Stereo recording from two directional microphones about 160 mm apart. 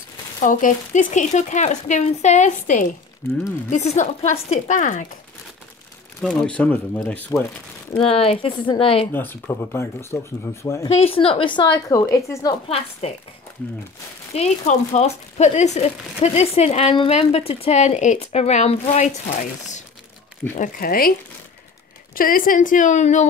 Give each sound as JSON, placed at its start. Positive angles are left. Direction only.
{"t": 0.4, "sound": "speech", "side_deg": 55}
{"t": 6.2, "sound": "speech", "side_deg": 5}
{"t": 8.0, "sound": "speech", "side_deg": 35}
{"t": 9.1, "sound": "speech", "side_deg": 15}
{"t": 10.9, "sound": "a woman's voice", "side_deg": 40}
{"t": 12.6, "sound": "speech", "side_deg": 40}
{"t": 14.3, "sound": "speech", "side_deg": 40}
{"t": 20.5, "sound": "a woman's voice", "side_deg": 60}
{"t": 22.1, "sound": "a woman's voice", "side_deg": 60}